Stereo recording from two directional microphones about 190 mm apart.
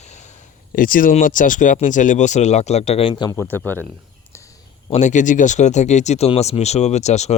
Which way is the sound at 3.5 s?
10° left (ahead or behind).